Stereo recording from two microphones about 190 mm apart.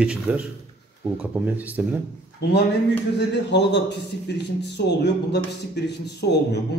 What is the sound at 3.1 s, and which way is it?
A man's voice, 65° left (ahead or behind).